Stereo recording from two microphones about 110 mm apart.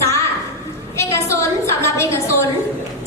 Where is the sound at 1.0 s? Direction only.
25° left (ahead or behind).